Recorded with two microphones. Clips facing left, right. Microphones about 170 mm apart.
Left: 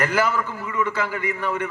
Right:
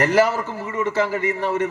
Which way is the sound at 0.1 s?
35° right (ahead or behind).